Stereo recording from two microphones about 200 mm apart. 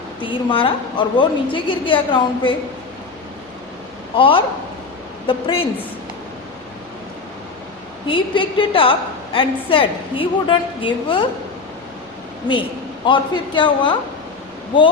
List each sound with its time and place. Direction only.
0.2 s a woman's voice: 25° left (ahead or behind)
4.2 s a woman's voice: 25° left (ahead or behind)
8.0 s a woman's voice: 25° left (ahead or behind)
13.1 s a woman's voice: 25° left (ahead or behind)